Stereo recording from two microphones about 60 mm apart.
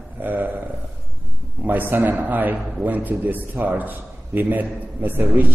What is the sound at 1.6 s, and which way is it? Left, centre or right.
A man's voice, right.